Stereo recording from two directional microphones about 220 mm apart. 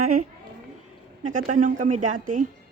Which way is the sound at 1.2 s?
35° right (ahead or behind).